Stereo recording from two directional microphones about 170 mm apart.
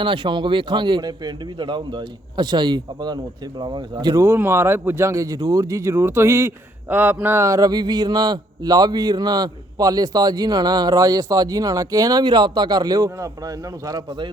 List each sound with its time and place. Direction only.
0.0 s speech: 30° right (ahead or behind)